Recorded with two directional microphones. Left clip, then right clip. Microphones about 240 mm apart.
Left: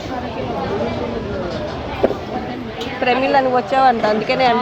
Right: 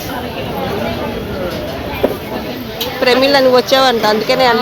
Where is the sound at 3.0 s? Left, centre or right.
Centre.